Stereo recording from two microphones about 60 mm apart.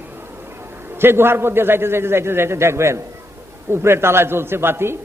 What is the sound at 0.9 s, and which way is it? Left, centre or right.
A man's voice, right.